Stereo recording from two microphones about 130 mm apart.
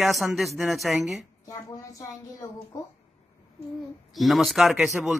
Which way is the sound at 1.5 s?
25° left (ahead or behind).